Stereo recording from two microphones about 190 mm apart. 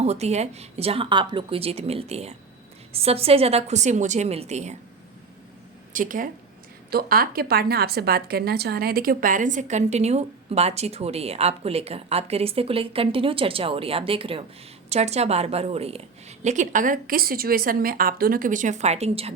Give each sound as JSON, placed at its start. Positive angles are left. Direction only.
{"t": 0.0, "sound": "a woman's voice", "side_deg": -35}
{"t": 5.9, "sound": "a woman's voice", "side_deg": -45}